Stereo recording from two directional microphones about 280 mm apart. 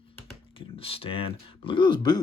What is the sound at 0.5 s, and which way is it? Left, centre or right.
Speech, centre.